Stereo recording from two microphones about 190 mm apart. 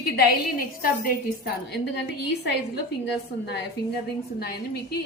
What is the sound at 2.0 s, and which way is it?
Speech, 65° left (ahead or behind).